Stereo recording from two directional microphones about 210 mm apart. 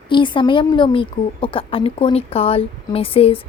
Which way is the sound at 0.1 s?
20° left (ahead or behind).